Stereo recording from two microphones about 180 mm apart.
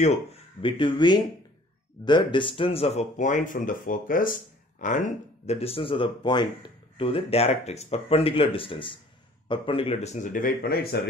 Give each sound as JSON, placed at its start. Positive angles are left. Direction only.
{"t": 0.0, "sound": "speech", "side_deg": 35}
{"t": 5.5, "sound": "speech", "side_deg": 35}